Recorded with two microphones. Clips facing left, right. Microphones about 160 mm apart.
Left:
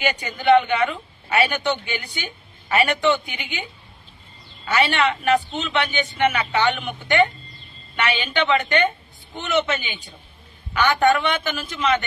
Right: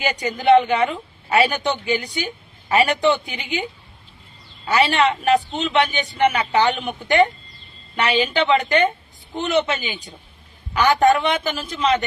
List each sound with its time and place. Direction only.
0.0 s a woman's voice: 35° right (ahead or behind)
4.7 s a woman's voice: 35° right (ahead or behind)